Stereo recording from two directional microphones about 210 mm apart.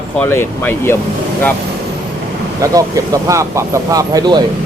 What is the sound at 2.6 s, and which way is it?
Speech, 15° right (ahead or behind).